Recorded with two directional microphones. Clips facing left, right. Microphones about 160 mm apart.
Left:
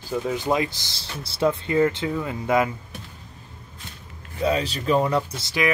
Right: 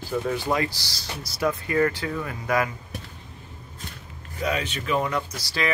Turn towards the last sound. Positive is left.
turn(degrees=20)  # may be behind; listen again after turning